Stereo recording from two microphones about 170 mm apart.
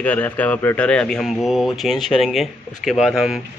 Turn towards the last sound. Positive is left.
turn(degrees=0)  # may be behind; listen again after turning